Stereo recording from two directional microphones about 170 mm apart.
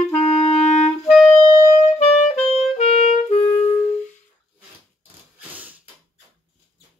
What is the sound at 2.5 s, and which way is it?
Clarinet, 40° left (ahead or behind).